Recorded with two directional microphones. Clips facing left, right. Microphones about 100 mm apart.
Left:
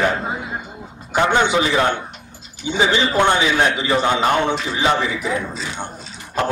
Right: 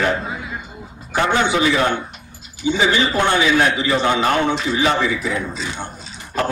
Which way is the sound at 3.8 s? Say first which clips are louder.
Even; 25° left (ahead or behind).